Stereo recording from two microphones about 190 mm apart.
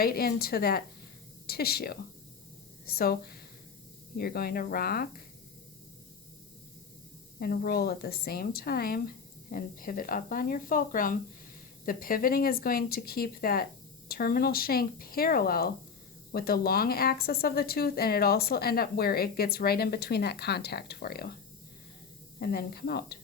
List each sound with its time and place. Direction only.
0.0 s speech: 50° left (ahead or behind)
7.3 s speech: 50° left (ahead or behind)
22.4 s speech: 55° left (ahead or behind)